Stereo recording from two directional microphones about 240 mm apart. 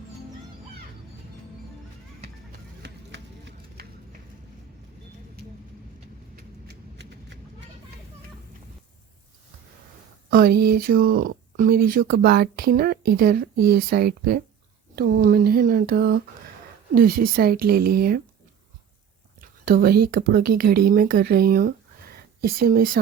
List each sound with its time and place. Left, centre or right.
2.8 s music: right
6.3 s a sound: right
10.2 s speech: right
19.4 s speech: right